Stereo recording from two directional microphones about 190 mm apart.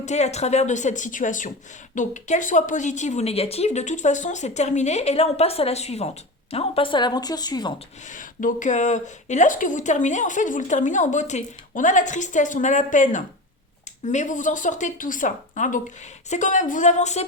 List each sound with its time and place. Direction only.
0.0 s a woman's voice: 35° left (ahead or behind); by 7.7 s 20° left (ahead or behind)
8.0 s speech: 45° left (ahead or behind)